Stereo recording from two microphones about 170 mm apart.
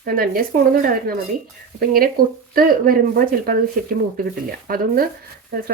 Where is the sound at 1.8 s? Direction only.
60° right (ahead or behind).